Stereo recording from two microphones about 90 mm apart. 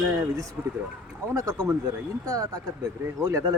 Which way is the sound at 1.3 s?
40° right (ahead or behind).